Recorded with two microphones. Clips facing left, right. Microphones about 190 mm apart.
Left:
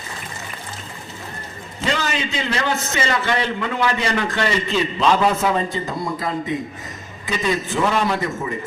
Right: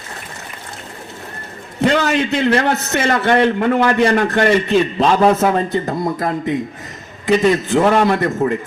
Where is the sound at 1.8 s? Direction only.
60° right (ahead or behind).